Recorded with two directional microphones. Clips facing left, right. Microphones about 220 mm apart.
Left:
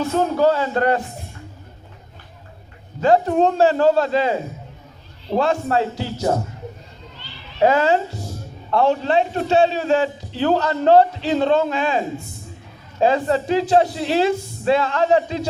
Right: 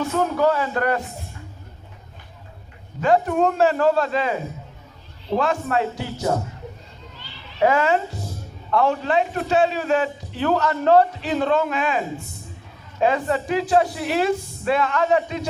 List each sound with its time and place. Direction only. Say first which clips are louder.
0.1 s a man's voice: left 3 dB; 30° left (ahead or behind)
3.0 s a man's voice: left 3 dB; 30° left (ahead or behind)
5.4 s a man's voice: left 3 dB; 30° left (ahead or behind)
7.6 s a man's voice: left 2 dB; 30° left (ahead or behind)